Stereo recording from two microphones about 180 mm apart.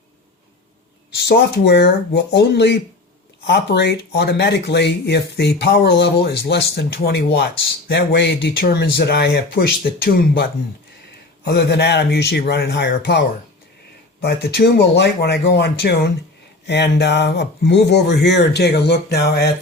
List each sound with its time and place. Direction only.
1.1 s speech: 65° left (ahead or behind)
11.4 s speech: 65° left (ahead or behind)